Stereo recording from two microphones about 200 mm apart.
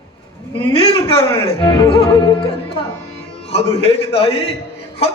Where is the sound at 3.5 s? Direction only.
30° left (ahead or behind).